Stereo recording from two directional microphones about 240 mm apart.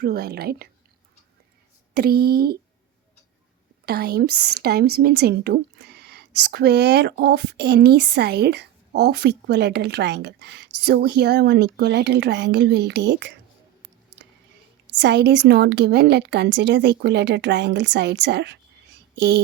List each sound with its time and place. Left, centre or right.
0.0 s a woman's voice: right
1.9 s a woman's voice: right
3.8 s a woman's voice: right
14.9 s speech: right